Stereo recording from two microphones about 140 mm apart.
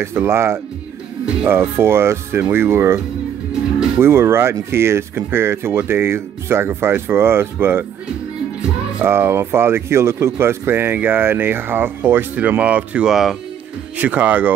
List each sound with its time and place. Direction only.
0.0 s speech: 15° right (ahead or behind)
4.0 s speech: 15° right (ahead or behind)
9.0 s speech: 15° right (ahead or behind)